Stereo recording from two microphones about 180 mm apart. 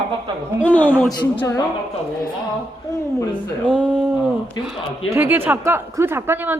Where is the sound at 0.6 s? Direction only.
10° left (ahead or behind).